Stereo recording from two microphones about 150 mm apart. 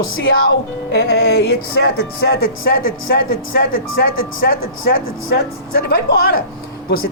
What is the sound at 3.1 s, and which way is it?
Speech, 75° left (ahead or behind).